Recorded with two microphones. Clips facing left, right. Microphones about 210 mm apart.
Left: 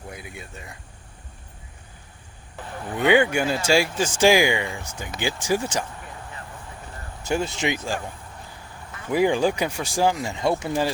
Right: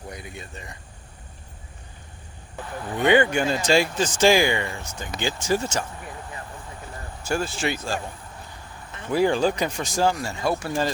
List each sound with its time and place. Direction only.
0.1 s speech: 5° left (ahead or behind)
3.0 s speech: 10° left (ahead or behind)
7.3 s speech: 20° left (ahead or behind)
9.1 s speech: 15° left (ahead or behind)